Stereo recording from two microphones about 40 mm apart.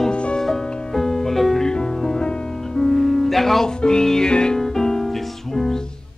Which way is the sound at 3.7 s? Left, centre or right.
Centre.